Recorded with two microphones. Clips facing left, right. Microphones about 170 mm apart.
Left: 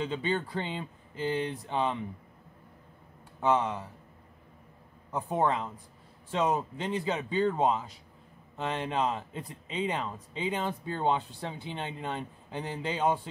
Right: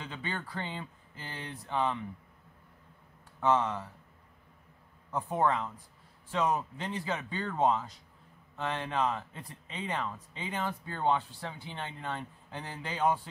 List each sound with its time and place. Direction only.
0.0 s speech: 20° left (ahead or behind)
3.3 s speech: 15° left (ahead or behind)
5.1 s speech: 20° left (ahead or behind)